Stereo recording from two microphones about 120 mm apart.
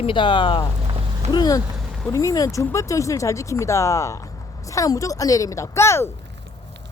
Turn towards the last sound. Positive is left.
turn(degrees=20)  # may be behind; listen again after turning